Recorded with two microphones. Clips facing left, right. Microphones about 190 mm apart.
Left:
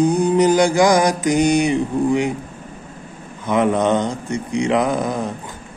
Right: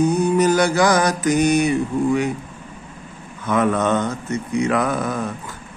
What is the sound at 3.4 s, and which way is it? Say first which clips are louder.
Mantra: left 2 dB; 20° left (ahead or behind).